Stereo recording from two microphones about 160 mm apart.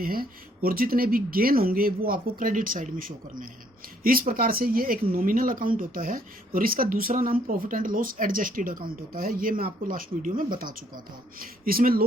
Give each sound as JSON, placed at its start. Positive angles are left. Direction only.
{"t": 0.0, "sound": "speech", "side_deg": -65}